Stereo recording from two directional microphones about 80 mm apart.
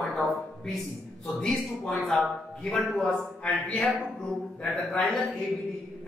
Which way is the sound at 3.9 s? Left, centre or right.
Centre.